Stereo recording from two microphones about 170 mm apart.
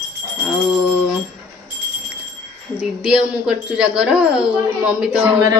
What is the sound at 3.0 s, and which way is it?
Speech, 5° right (ahead or behind).